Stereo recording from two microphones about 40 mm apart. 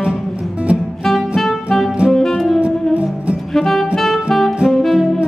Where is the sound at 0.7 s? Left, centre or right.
Right.